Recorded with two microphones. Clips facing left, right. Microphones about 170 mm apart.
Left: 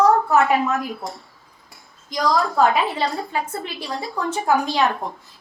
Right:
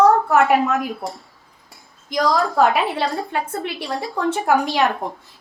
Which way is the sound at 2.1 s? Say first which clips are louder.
Right 2 dB; 60° right (ahead or behind).